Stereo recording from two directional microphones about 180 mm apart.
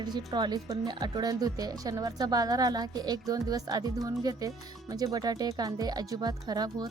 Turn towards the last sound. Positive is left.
turn(degrees=-20)  # may be behind; listen again after turning